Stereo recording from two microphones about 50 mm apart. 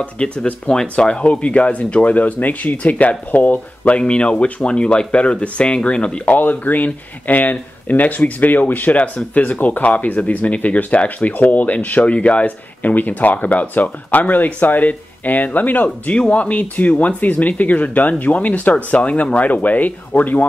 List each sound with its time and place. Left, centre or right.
0.0 s speech: left
6.2 s speech: left